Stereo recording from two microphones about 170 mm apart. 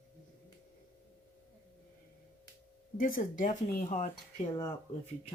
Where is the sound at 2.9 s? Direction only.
55° left (ahead or behind).